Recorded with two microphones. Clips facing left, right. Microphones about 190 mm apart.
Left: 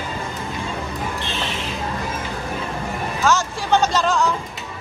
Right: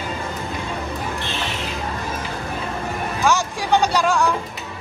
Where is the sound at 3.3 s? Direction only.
15° right (ahead or behind).